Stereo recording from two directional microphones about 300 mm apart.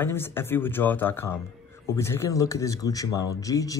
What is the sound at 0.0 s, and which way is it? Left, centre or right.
Speech, centre.